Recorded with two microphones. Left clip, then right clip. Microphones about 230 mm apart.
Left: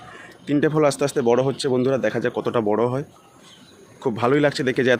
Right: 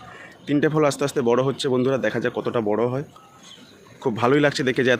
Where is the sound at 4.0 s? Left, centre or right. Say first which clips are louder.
Even; centre.